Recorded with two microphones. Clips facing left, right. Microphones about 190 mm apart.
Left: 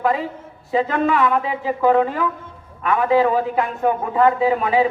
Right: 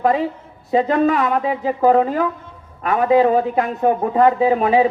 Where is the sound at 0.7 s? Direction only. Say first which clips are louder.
Right 3 dB; 40° right (ahead or behind).